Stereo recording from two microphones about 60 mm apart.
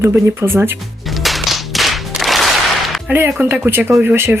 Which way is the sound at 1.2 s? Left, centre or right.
Centre.